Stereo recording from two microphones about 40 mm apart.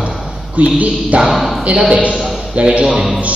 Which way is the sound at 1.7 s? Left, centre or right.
Right.